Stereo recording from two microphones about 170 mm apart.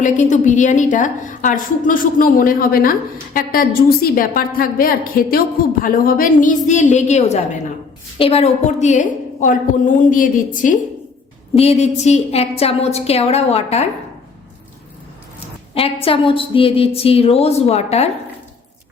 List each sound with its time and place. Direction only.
0.0 s a woman's voice: 45° left (ahead or behind)
11.5 s a woman's voice: 40° left (ahead or behind)
16.0 s a woman's voice: 30° left (ahead or behind)